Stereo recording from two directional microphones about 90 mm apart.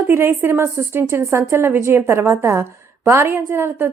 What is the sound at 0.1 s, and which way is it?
A woman's voice, 25° right (ahead or behind).